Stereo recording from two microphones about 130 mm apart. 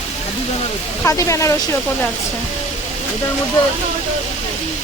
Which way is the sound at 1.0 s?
25° left (ahead or behind).